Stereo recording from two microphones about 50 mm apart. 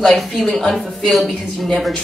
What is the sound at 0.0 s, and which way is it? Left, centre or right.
A woman's voice, centre.